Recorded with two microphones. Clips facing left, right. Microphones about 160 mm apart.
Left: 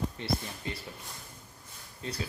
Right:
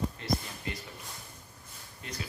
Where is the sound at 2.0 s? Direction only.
30° left (ahead or behind).